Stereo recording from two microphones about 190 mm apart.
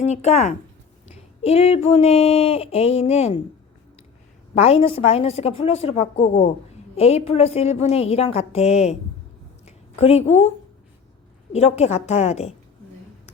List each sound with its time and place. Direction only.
0.0 s speech: 35° left (ahead or behind)
4.5 s a woman's voice: 35° left (ahead or behind)
11.5 s speech: 35° left (ahead or behind)